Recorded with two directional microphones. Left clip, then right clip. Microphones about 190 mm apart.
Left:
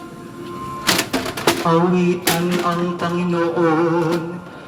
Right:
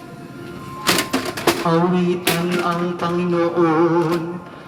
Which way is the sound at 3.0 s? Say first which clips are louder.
Right 1 dB; 45° left (ahead or behind).